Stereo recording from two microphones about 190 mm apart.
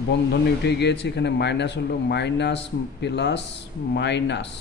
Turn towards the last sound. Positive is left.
turn(degrees=65)  # may be behind; listen again after turning